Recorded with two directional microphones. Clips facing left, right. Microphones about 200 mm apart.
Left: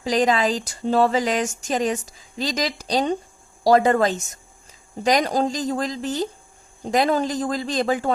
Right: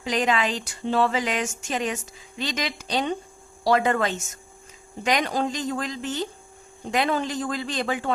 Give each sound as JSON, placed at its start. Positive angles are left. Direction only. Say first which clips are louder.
{"t": 0.0, "sound": "speech", "louder": "left 4 dB", "side_deg": 40}